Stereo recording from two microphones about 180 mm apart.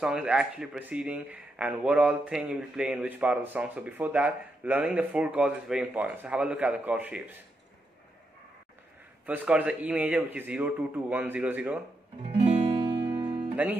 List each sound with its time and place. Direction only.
0.0 s speech: 5° right (ahead or behind)
9.2 s speech: 10° right (ahead or behind)
12.2 s music: 30° right (ahead or behind)
13.6 s speech: 10° right (ahead or behind)